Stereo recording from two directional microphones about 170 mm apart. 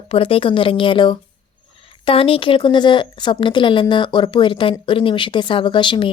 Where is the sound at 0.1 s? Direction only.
35° left (ahead or behind).